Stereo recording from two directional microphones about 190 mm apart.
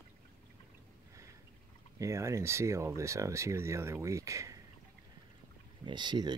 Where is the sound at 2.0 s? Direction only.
15° right (ahead or behind).